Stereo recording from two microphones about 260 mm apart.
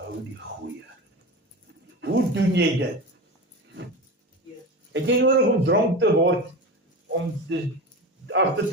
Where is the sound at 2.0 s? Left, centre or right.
Right.